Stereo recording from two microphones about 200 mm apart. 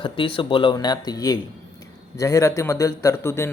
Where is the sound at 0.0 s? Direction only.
25° left (ahead or behind).